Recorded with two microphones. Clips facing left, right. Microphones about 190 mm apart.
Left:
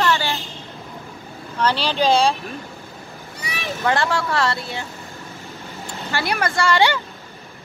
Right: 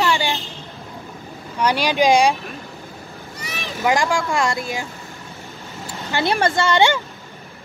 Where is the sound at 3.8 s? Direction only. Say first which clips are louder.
Right 2 dB; 10° right (ahead or behind).